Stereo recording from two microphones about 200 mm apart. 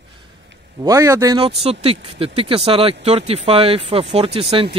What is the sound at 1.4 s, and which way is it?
Speech, 30° right (ahead or behind).